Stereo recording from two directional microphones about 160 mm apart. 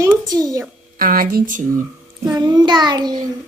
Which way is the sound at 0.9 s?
60° right (ahead or behind).